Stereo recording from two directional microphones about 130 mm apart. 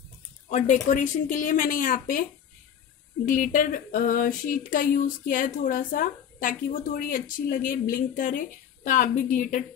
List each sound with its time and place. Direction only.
0.5 s a woman's voice: 70° left (ahead or behind); by 2.2 s 90° left
3.3 s speech: 90° left
8.8 s a woman's voice: 80° left